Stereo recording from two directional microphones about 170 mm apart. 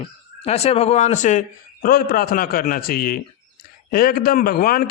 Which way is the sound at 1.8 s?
60° left (ahead or behind).